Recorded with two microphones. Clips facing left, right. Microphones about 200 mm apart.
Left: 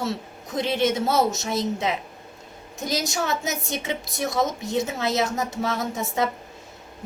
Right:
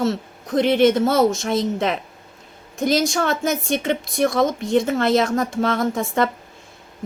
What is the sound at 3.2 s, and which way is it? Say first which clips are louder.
A woman's voice: right 6 dB; 55° right (ahead or behind).